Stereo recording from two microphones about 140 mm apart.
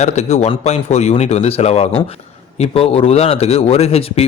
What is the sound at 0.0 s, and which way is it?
A man's voice, 50° left (ahead or behind).